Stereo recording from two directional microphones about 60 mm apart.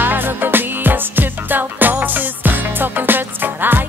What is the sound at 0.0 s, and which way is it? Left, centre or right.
Music, right.